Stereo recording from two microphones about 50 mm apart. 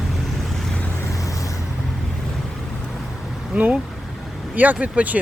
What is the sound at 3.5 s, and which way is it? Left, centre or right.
Speech, right.